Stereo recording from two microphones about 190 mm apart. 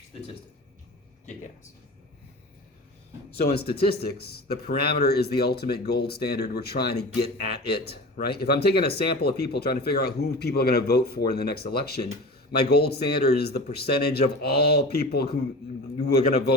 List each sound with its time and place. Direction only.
3.3 s speech: 55° left (ahead or behind)